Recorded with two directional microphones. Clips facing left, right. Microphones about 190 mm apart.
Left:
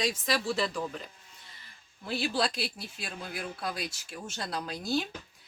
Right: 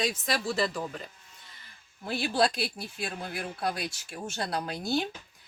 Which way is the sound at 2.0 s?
50° right (ahead or behind).